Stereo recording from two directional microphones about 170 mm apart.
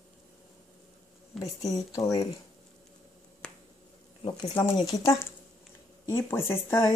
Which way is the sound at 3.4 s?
5° left (ahead or behind).